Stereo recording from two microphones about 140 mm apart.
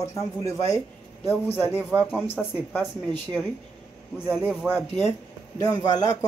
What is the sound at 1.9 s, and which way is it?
Speech, 20° right (ahead or behind).